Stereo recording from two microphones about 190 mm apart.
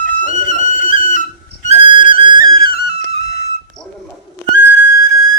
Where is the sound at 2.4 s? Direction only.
50° left (ahead or behind).